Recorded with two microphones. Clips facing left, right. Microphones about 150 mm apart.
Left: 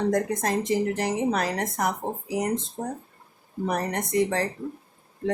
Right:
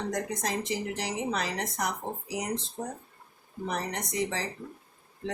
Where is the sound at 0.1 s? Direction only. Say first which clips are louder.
Left 7 dB; 50° left (ahead or behind).